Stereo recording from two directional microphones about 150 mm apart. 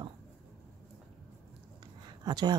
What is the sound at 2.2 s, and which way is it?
Speech, 30° right (ahead or behind).